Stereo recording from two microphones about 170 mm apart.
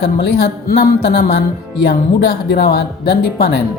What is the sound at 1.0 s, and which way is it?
Speech, 65° left (ahead or behind).